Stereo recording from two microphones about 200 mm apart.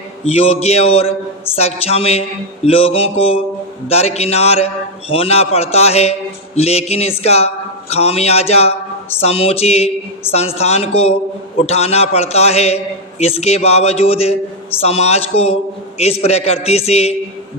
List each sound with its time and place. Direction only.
0.3 s a man's voice: 30° left (ahead or behind)
2.6 s mantra: 30° left (ahead or behind)
3.8 s a man's voice: 30° left (ahead or behind)